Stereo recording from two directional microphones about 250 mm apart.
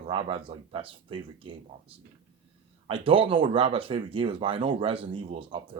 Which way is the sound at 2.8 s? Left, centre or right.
Right.